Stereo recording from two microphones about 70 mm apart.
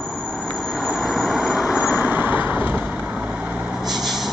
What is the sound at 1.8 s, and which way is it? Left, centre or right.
Vehicle, right.